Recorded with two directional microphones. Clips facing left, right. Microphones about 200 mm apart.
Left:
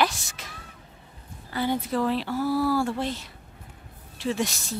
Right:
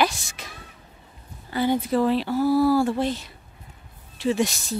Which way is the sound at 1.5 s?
20° right (ahead or behind).